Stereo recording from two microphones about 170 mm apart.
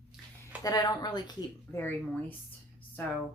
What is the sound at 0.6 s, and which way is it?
A woman's voice, 25° left (ahead or behind).